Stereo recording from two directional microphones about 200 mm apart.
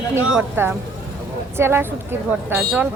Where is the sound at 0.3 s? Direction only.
10° right (ahead or behind).